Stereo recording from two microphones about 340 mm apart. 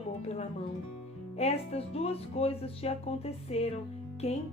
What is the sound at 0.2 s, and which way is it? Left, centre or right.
Music, centre.